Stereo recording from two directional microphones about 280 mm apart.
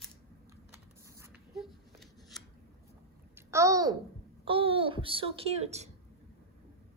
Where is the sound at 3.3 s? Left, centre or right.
Centre.